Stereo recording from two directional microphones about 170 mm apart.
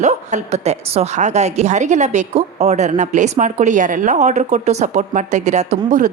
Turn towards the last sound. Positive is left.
turn(degrees=-45)  # may be behind; listen again after turning